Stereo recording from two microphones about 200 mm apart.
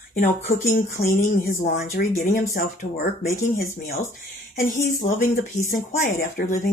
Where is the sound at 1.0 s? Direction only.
45° left (ahead or behind).